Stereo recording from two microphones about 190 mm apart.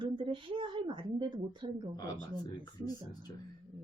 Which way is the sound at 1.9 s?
20° left (ahead or behind).